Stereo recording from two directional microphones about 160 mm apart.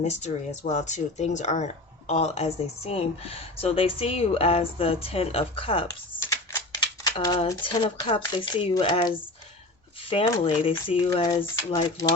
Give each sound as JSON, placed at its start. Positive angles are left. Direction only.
{"t": 0.0, "sound": "speech", "side_deg": 45}
{"t": 6.1, "sound": "typing", "side_deg": 20}
{"t": 7.0, "sound": "a sound", "side_deg": 25}
{"t": 7.4, "sound": "speech", "side_deg": 30}